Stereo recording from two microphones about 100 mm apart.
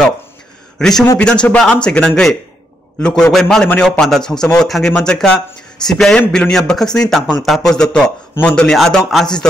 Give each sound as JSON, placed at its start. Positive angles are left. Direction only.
{"t": 0.7, "sound": "a man's voice", "side_deg": 5}
{"t": 8.7, "sound": "a man's voice", "side_deg": 0}